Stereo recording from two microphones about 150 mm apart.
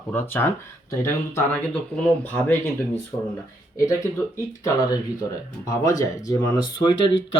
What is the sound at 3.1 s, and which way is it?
Speech, 20° left (ahead or behind).